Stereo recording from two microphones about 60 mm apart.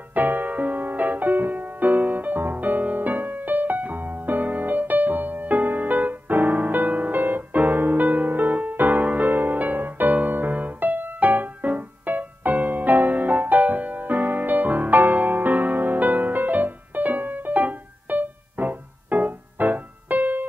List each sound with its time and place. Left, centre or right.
0.1 s music: right